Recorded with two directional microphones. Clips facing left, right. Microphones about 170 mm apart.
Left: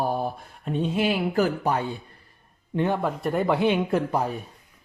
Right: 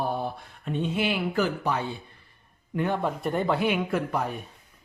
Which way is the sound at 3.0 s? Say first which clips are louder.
Left 2 dB; centre (ahead or behind).